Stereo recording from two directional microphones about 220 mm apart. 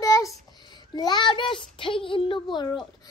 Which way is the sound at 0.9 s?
20° left (ahead or behind).